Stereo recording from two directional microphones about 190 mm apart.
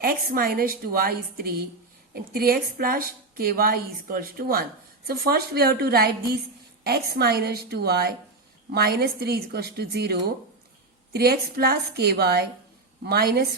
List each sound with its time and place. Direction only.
0.0 s a woman's voice: 50° right (ahead or behind)